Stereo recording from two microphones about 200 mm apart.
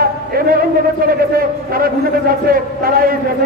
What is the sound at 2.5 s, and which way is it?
Speech, 45° right (ahead or behind).